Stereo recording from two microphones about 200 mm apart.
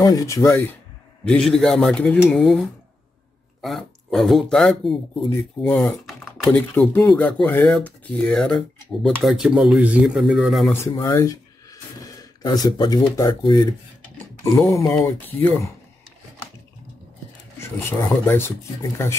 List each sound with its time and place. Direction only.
0.0 s speech: 20° left (ahead or behind); by 10.7 s 5° right (ahead or behind)
10.7 s speech: 15° left (ahead or behind)
14.0 s a sound: 10° left (ahead or behind)
15.0 s speech: 10° left (ahead or behind)
17.6 s speech: 15° left (ahead or behind)